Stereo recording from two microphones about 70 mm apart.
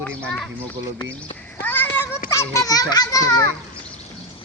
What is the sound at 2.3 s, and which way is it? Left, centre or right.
A child's voice, left.